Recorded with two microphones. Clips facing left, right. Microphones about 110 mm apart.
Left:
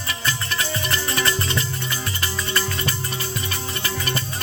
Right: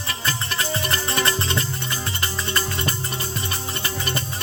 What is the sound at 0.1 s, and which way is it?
Music, 40° right (ahead or behind).